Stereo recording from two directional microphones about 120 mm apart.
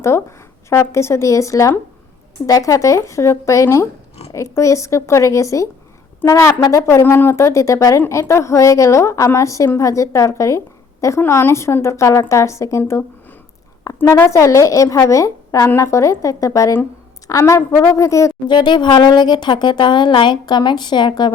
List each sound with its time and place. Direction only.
0.0 s a woman's voice: 25° left (ahead or behind)
13.8 s a sound: 30° left (ahead or behind)
14.2 s a woman's voice: 25° left (ahead or behind)
18.4 s speech: 40° left (ahead or behind)